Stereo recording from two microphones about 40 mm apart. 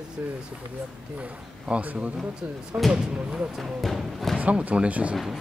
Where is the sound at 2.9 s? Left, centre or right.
Right.